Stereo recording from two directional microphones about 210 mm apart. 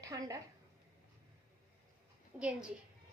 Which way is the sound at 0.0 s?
15° right (ahead or behind).